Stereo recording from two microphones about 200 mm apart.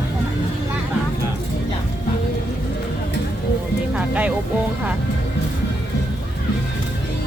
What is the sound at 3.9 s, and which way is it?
Speech, 5° right (ahead or behind).